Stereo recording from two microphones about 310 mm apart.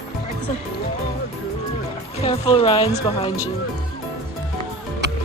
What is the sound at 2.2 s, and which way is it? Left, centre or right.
Speech, centre.